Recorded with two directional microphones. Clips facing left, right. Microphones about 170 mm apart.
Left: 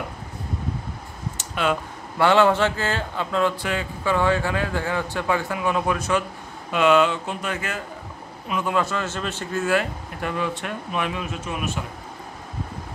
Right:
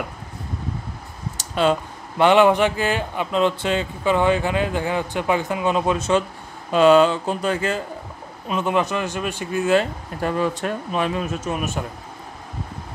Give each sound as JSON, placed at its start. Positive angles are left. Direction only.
{"t": 1.4, "sound": "a sound", "side_deg": -30}
{"t": 2.2, "sound": "speech", "side_deg": -15}
{"t": 10.2, "sound": "speech", "side_deg": -40}